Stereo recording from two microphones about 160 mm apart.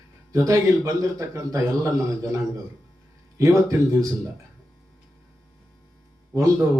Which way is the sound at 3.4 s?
20° right (ahead or behind).